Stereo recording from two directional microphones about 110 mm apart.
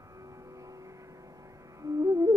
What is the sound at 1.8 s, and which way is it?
Music, 30° right (ahead or behind).